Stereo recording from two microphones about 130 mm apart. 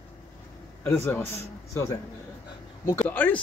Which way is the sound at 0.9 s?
20° left (ahead or behind).